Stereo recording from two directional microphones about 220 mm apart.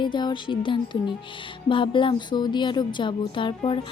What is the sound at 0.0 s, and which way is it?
Speech, 20° left (ahead or behind).